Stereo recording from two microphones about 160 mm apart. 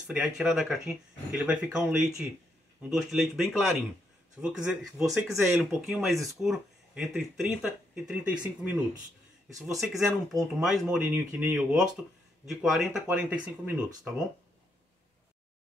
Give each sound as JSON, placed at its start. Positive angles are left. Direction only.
{"t": 0.0, "sound": "speech", "side_deg": -5}